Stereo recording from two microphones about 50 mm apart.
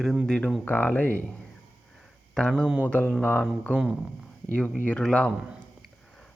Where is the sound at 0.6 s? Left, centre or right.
Left.